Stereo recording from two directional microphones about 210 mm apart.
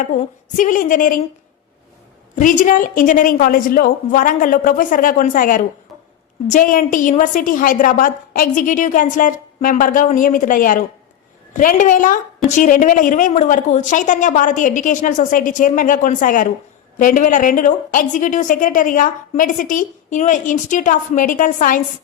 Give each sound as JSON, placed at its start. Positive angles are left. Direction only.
{"t": 0.0, "sound": "a woman's voice", "side_deg": 40}
{"t": 2.3, "sound": "a woman's voice", "side_deg": 40}